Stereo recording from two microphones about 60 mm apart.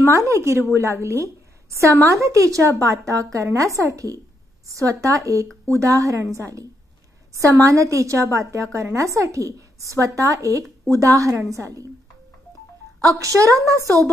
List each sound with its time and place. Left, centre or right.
0.1 s a woman's voice: right
13.0 s a woman's voice: right